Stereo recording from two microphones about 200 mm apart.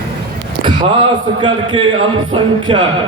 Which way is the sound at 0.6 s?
25° right (ahead or behind).